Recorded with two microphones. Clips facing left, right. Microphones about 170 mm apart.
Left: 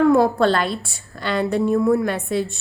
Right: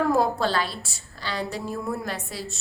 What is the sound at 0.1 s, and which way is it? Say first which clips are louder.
A woman's voice: left 7 dB; 60° left (ahead or behind).